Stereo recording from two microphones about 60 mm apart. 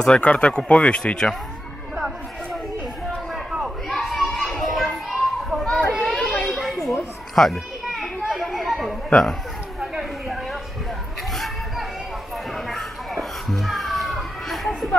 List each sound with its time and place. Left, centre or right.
0.0 s speech: centre
3.9 s children playing: centre
6.1 s children playing: centre
9.1 s music: centre
9.9 s a sound: centre
12.5 s children playing: centre